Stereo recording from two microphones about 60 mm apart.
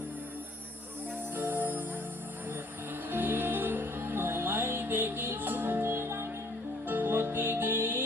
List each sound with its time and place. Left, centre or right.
1.4 s music: right
3.1 s music: right